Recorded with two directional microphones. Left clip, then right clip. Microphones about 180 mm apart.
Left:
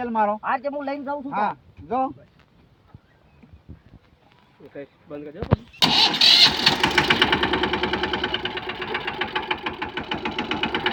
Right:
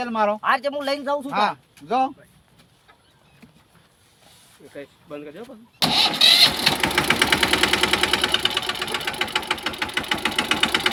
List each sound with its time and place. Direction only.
0.0 s speech: 45° right (ahead or behind)
0.4 s speech: 10° right (ahead or behind)
1.3 s speech: 45° right (ahead or behind)
4.7 s speech: 35° left (ahead or behind)
5.8 s engine starting: 15° right (ahead or behind)